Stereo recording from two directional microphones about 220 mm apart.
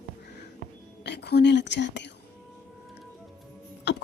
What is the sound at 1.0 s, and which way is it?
Speech, 50° left (ahead or behind).